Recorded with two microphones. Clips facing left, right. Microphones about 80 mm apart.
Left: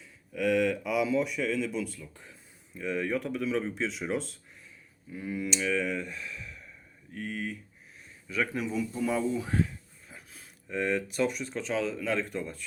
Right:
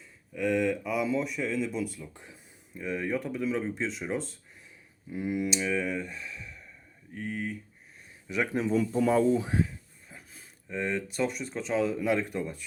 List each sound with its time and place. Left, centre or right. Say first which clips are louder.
0.3 s speech: left 1 dB; centre
2.1 s a sound: right 2 dB; centre
2.8 s speech: left 1 dB; centre
5.1 s speech: right 3 dB; centre
8.3 s a man's voice: right 2 dB; right
8.6 s speech: right 5 dB; right
9.6 s speech: even; centre